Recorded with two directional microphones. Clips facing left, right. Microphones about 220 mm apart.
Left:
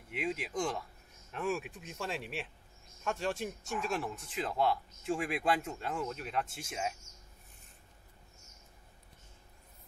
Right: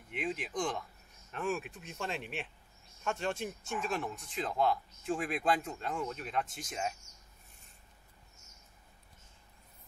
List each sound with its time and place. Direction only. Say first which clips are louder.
0.1 s speech: left 1 dB; 5° left (ahead or behind)